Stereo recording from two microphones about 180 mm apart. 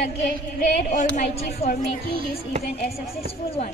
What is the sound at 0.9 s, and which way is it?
Speech, 40° left (ahead or behind).